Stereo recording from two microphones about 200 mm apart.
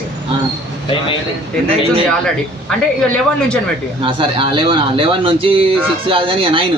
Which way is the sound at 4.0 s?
25° right (ahead or behind).